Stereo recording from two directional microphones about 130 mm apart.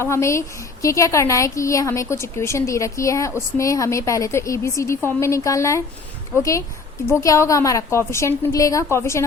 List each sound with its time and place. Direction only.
0.0 s a woman's voice: 20° left (ahead or behind)